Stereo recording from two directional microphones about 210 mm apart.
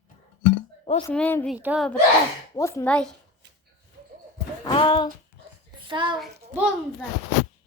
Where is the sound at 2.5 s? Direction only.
15° left (ahead or behind).